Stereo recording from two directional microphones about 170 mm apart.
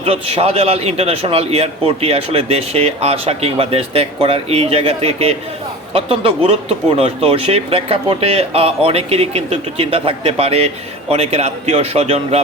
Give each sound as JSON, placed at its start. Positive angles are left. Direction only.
{"t": 0.0, "sound": "a man's voice", "side_deg": -35}